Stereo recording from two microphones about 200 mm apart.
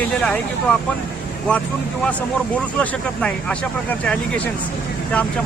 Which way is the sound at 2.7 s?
5° left (ahead or behind).